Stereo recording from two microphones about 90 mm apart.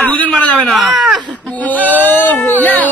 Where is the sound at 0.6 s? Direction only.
Centre (ahead or behind).